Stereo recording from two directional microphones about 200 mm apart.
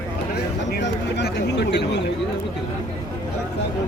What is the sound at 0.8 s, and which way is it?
Speech, 60° left (ahead or behind).